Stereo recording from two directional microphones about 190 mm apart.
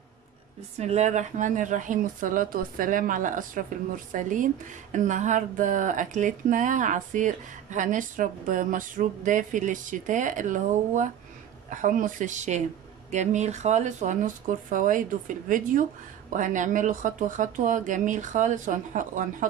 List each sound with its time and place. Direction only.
0.7 s speech: 35° right (ahead or behind)